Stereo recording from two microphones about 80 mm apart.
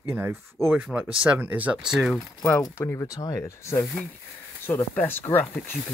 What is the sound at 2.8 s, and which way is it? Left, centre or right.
Speech, left.